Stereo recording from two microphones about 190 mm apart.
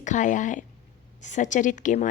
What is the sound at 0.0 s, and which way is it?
A woman's voice, 40° left (ahead or behind).